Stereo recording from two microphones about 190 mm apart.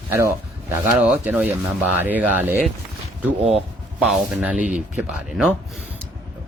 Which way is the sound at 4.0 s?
5° right (ahead or behind).